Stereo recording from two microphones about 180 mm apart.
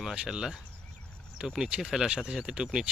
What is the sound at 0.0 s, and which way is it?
Speech, centre (ahead or behind).